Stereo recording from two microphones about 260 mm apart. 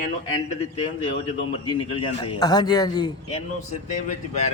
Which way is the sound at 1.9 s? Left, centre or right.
Centre.